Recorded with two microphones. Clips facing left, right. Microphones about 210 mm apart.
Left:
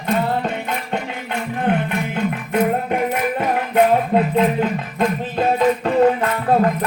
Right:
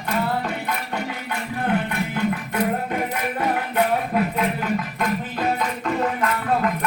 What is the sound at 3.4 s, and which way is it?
Music, 25° left (ahead or behind).